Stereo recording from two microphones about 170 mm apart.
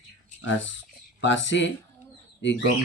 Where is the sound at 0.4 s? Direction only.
90° left.